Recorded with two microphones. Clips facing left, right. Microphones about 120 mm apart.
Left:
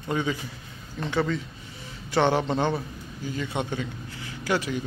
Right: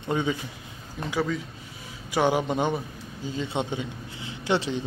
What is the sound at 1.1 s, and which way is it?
Speech, 5° right (ahead or behind).